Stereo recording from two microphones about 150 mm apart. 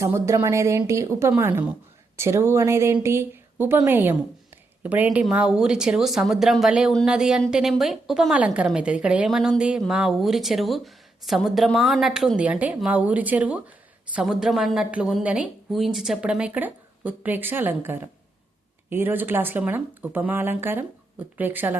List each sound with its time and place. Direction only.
0.0 s a woman's voice: 15° right (ahead or behind)